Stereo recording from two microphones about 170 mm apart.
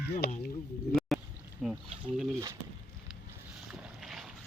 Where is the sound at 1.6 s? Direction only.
5° right (ahead or behind).